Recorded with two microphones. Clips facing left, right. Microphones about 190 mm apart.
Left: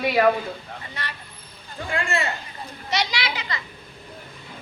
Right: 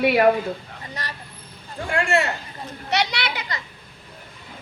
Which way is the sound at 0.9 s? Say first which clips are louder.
Right 3 dB; 40° right (ahead or behind).